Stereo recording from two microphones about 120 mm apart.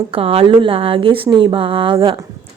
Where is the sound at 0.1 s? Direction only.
50° right (ahead or behind).